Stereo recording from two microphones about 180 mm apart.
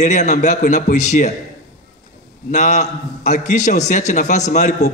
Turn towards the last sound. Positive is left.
turn(degrees=45)  # may be behind; listen again after turning